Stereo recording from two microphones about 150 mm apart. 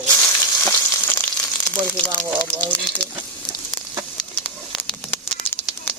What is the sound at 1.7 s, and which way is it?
Speech, 10° left (ahead or behind).